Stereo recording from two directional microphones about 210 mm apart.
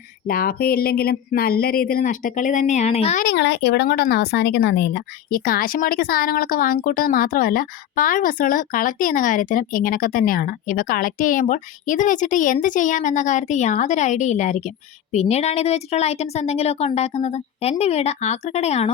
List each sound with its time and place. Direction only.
0.3 s speech: 45° left (ahead or behind)
3.2 s speech: 55° left (ahead or behind); by 18.9 s 30° left (ahead or behind)